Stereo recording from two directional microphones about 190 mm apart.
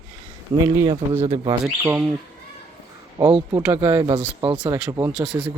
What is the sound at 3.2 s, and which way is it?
Speech, 15° right (ahead or behind).